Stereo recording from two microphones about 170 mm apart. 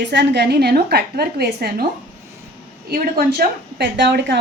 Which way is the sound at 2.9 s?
60° right (ahead or behind).